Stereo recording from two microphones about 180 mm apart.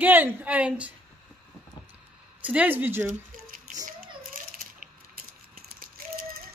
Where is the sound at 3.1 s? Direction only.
50° right (ahead or behind).